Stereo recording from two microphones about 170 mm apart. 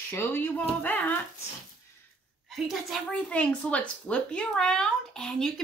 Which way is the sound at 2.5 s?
Centre (ahead or behind).